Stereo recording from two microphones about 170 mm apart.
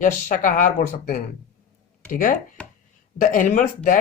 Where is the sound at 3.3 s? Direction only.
50° left (ahead or behind).